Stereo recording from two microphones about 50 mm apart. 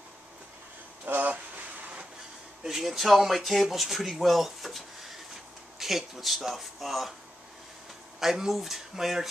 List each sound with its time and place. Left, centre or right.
1.0 s a sound: right
2.6 s speech: centre
8.2 s speech: centre